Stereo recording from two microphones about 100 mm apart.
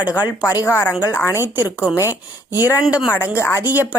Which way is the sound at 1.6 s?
10° right (ahead or behind).